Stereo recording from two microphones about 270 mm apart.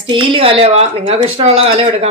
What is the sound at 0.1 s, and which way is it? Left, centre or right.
Speech, centre.